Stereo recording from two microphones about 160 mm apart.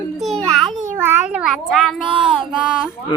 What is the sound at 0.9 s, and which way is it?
A child's voice, 15° right (ahead or behind).